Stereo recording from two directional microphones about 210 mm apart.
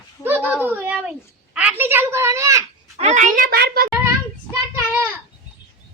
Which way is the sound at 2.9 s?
30° right (ahead or behind).